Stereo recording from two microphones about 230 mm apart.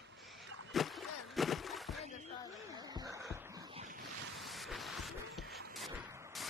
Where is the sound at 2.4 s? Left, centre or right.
Centre.